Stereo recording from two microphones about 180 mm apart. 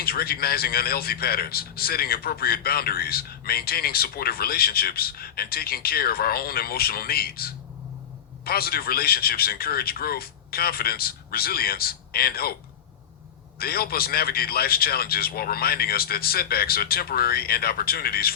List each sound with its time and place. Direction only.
0.0 s speech: 55° left (ahead or behind)
13.6 s speech: 60° left (ahead or behind)